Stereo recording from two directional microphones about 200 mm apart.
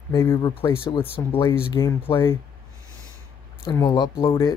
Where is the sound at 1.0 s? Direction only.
25° left (ahead or behind).